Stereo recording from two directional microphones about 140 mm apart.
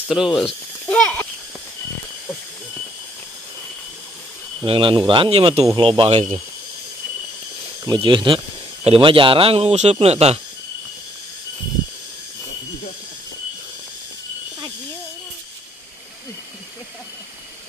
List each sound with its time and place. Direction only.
0.1 s speech: centre (ahead or behind)
0.8 s a sound: 5° left (ahead or behind)
4.6 s speech: 40° right (ahead or behind)
7.8 s speech: 35° right (ahead or behind)